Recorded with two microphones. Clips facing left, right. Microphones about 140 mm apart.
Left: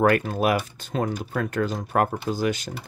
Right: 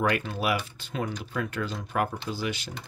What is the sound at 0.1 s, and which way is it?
Speech, 45° left (ahead or behind).